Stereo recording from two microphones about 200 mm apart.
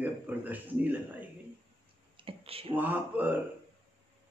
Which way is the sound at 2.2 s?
25° right (ahead or behind).